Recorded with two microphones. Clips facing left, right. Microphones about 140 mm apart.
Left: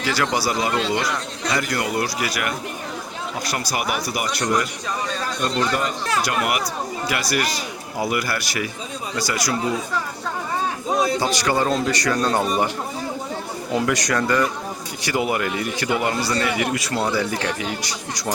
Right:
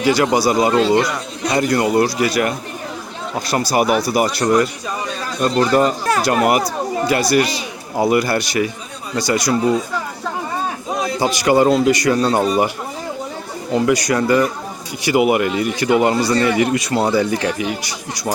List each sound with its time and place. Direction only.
0.0 s a man's voice: 20° right (ahead or behind)
11.2 s speech: 15° right (ahead or behind)
13.7 s speech: centre (ahead or behind)